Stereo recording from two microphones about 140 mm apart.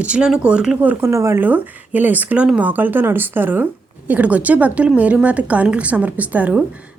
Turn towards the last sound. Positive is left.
turn(degrees=-10)  # may be behind; listen again after turning